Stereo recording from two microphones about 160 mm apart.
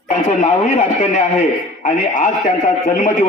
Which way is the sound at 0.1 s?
45° left (ahead or behind).